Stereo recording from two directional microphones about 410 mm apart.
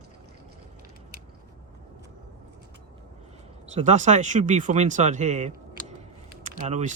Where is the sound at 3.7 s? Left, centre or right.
Centre.